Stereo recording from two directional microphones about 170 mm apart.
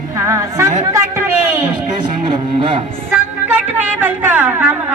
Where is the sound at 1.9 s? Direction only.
30° right (ahead or behind).